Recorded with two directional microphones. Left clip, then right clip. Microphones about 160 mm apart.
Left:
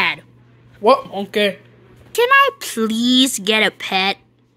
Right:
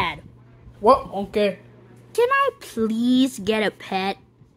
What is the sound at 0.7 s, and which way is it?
Speech, centre (ahead or behind).